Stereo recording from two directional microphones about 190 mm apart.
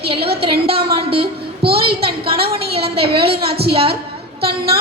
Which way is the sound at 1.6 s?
55° right (ahead or behind).